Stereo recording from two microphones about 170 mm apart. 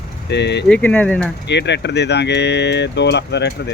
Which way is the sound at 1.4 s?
90° left.